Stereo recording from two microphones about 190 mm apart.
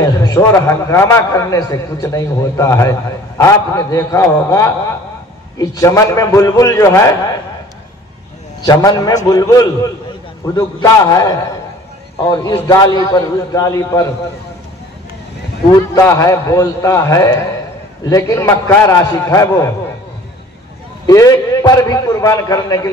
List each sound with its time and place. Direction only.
0.0 s a man's voice: 20° left (ahead or behind)
8.6 s a man's voice: 20° left (ahead or behind)
15.9 s a man's voice: 15° left (ahead or behind)
21.1 s a man's voice: 20° left (ahead or behind)